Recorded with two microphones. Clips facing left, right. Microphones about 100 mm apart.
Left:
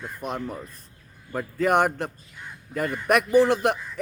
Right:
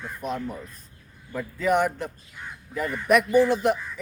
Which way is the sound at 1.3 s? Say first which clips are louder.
Left 1 dB; 55° left (ahead or behind).